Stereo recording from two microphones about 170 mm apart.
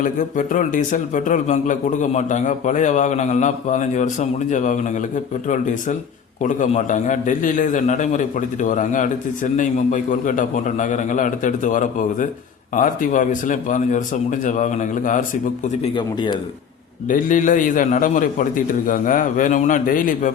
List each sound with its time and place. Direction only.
0.0 s a man's voice: 50° left (ahead or behind)
6.4 s a man's voice: 50° left (ahead or behind)
15.8 s speech: 30° left (ahead or behind)
17.1 s a man's voice: 50° left (ahead or behind)